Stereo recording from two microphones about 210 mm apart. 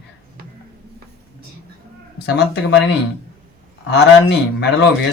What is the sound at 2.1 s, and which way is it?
Speech, 55° left (ahead or behind).